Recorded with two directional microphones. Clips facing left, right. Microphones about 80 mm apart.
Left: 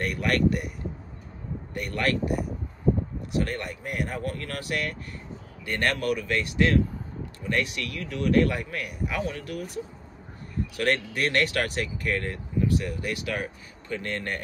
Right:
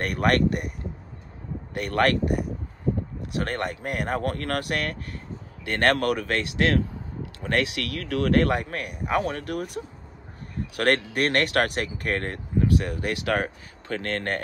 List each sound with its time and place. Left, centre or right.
0.0 s speech: right
1.8 s speech: right